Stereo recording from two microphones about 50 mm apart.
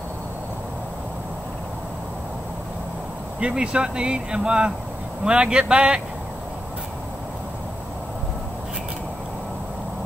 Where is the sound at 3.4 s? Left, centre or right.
Centre.